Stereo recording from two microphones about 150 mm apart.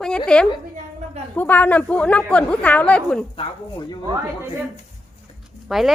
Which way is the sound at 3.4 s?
30° left (ahead or behind).